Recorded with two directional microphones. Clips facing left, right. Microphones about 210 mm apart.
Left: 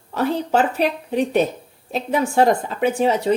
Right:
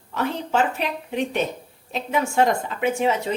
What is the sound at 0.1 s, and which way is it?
Speech, 40° left (ahead or behind).